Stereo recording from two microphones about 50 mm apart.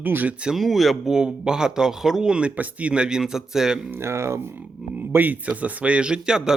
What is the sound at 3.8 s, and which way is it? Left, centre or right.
Speech, right.